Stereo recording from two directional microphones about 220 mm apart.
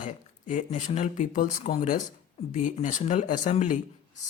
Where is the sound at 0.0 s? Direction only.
35° left (ahead or behind).